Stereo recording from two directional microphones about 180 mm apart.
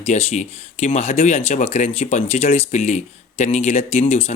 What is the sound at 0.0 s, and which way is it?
Speech, 40° left (ahead or behind).